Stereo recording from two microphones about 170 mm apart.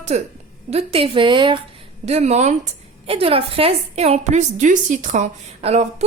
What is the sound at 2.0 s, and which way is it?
A woman's voice, 40° right (ahead or behind).